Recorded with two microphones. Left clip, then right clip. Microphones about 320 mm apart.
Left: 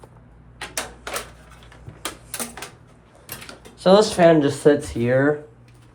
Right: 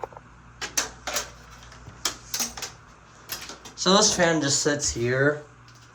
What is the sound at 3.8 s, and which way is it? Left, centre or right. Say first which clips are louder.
Speech: left 5 dB; centre.